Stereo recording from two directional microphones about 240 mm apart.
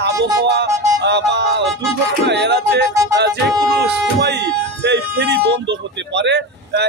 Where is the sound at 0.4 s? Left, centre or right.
Right.